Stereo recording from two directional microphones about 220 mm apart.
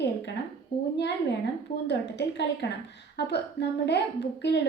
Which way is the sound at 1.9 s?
50° left (ahead or behind).